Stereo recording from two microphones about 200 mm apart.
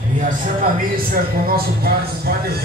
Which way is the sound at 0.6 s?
45° right (ahead or behind).